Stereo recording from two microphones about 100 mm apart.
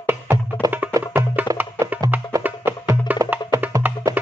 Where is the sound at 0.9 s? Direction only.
25° right (ahead or behind).